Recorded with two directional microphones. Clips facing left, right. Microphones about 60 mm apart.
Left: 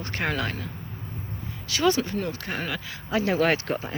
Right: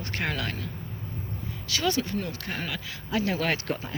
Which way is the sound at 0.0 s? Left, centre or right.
Centre.